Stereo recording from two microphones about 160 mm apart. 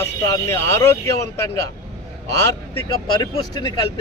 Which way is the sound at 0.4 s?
15° left (ahead or behind).